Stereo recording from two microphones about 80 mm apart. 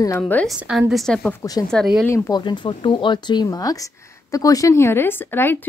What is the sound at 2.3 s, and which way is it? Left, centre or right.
Speech, left.